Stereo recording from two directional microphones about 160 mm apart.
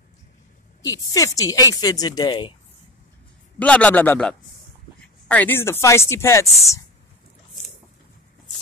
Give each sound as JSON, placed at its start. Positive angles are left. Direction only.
{"t": 0.8, "sound": "speech", "side_deg": 20}
{"t": 3.5, "sound": "speech", "side_deg": 10}